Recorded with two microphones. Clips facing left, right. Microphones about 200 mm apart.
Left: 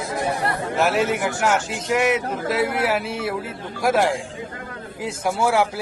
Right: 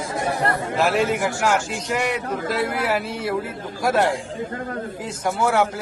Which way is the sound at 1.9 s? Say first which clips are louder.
Left 4 dB; 10° left (ahead or behind).